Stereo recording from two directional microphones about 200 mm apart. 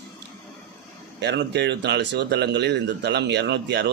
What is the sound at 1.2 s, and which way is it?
Speech, 60° right (ahead or behind).